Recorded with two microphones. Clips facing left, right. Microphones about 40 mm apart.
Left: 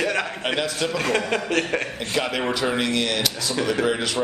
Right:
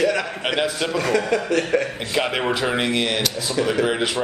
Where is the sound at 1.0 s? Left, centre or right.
Left.